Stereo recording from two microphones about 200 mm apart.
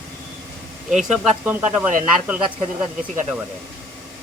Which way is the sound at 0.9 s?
Centre (ahead or behind).